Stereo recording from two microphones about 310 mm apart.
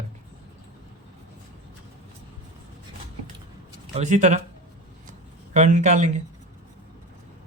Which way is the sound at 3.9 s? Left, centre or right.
Right.